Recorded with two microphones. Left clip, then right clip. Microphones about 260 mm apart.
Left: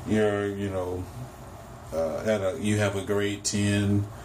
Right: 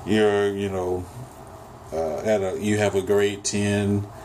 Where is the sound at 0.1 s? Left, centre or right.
Right.